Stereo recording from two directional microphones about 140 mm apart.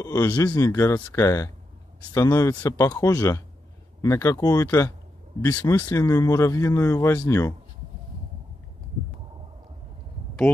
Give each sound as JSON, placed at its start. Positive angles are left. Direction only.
{"t": 0.0, "sound": "speech", "side_deg": 25}